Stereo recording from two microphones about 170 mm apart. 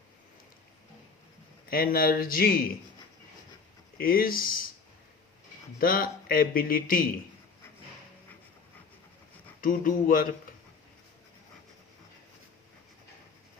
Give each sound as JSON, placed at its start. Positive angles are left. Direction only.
{"t": 1.7, "sound": "speech", "side_deg": 60}
{"t": 3.9, "sound": "speech", "side_deg": 60}
{"t": 5.8, "sound": "speech", "side_deg": 60}
{"t": 9.6, "sound": "speech", "side_deg": 55}